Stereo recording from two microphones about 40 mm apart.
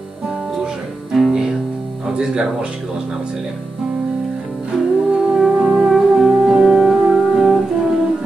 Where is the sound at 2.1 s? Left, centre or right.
Centre.